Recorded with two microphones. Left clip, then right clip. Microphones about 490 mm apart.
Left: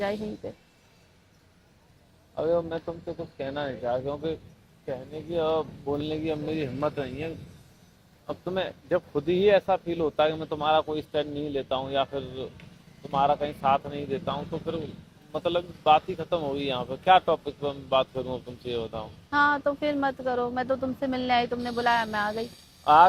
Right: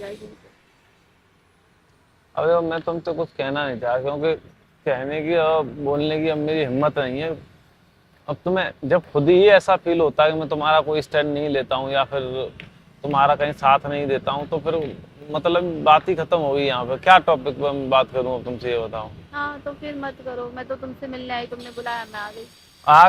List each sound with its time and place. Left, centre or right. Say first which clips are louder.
2.3 s speech: right 7 dB; right
5.3 s speech: right 7 dB; right
5.9 s speech: right 8 dB; right
8.5 s speech: right 7 dB; right
19.3 s speech: left 6 dB; left